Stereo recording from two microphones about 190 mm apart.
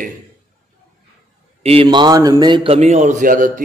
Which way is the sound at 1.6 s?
30° right (ahead or behind).